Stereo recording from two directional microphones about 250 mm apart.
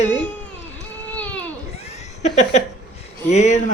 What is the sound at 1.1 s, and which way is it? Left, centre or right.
Baby cry, centre.